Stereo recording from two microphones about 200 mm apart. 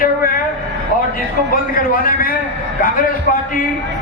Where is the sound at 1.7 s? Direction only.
45° left (ahead or behind).